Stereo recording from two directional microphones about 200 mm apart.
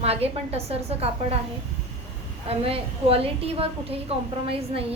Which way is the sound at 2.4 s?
30° right (ahead or behind).